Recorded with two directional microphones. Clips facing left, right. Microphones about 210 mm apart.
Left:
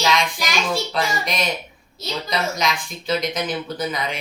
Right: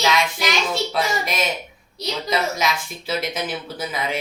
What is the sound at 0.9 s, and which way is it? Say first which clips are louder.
Speech: right 1 dB; 5° right (ahead or behind).